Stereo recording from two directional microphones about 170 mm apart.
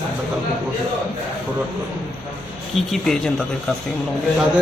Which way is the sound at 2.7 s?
Centre (ahead or behind).